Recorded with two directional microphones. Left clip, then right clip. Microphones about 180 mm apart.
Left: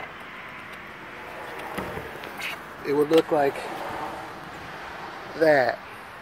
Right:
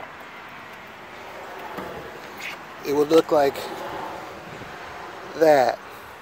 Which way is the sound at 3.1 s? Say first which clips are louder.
Right 4 dB; 25° right (ahead or behind).